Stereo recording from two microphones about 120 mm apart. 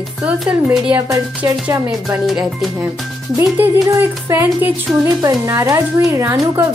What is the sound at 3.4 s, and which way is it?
Speech, 20° right (ahead or behind).